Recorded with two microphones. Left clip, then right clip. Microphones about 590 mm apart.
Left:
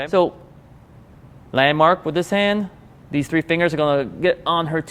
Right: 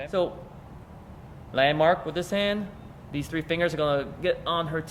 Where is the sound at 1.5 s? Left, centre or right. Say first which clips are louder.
Left 6 dB; left.